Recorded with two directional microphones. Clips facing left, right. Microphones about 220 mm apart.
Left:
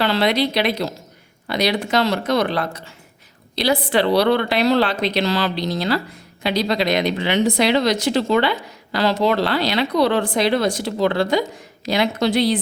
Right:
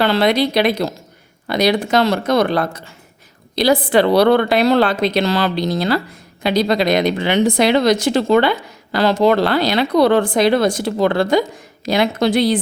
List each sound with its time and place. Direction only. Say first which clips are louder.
0.0 s speech: right 3 dB; 50° right (ahead or behind)